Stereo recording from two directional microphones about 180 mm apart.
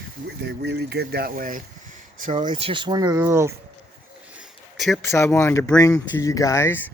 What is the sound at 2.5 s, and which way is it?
Speech, 30° right (ahead or behind).